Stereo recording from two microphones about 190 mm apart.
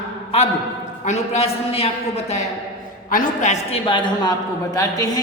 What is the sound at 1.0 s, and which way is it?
A woman's voice, 35° left (ahead or behind).